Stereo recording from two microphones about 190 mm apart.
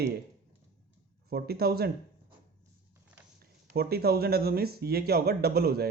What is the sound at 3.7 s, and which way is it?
Speech, 55° right (ahead or behind).